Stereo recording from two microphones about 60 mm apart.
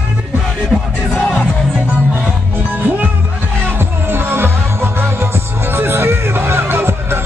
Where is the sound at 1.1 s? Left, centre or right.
Centre.